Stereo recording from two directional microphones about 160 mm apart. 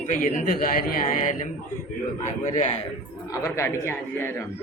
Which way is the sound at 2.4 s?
45° left (ahead or behind).